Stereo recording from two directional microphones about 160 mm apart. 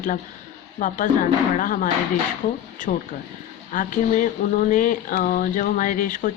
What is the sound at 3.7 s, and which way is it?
Speech, 55° left (ahead or behind).